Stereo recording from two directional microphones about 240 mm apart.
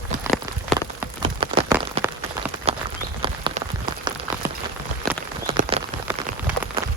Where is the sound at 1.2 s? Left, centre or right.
Right.